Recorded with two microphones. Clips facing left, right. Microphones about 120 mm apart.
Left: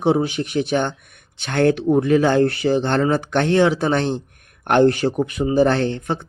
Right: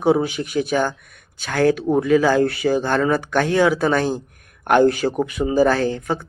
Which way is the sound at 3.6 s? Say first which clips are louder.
Right 2 dB; 25° left (ahead or behind).